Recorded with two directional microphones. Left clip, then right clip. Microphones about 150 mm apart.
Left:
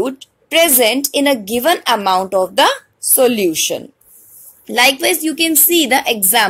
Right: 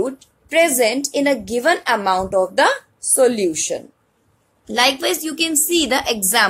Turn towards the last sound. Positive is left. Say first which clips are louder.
# left 3 dB
turn(degrees=25)  # may be behind; listen again after turning